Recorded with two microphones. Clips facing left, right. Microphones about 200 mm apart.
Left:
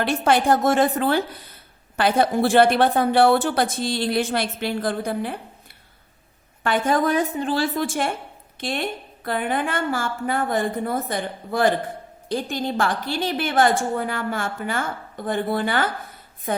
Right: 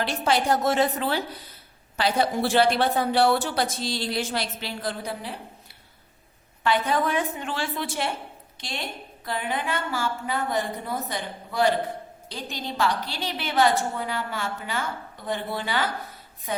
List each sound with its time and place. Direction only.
0.0 s a woman's voice: 55° left (ahead or behind)